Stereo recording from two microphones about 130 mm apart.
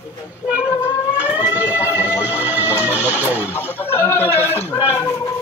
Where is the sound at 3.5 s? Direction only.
15° left (ahead or behind).